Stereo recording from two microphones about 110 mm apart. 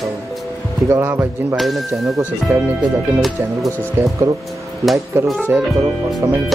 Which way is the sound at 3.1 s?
Centre (ahead or behind).